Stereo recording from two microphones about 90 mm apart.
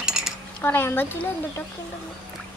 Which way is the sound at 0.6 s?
25° left (ahead or behind).